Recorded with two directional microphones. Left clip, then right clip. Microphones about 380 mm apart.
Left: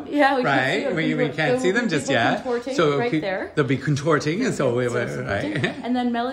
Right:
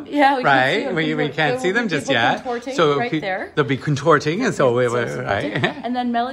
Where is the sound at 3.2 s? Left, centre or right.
Centre.